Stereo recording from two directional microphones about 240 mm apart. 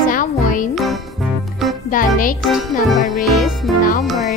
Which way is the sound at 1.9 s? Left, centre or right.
Left.